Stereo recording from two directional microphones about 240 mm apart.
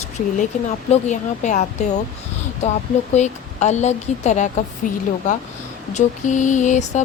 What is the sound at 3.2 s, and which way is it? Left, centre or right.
Speech, left.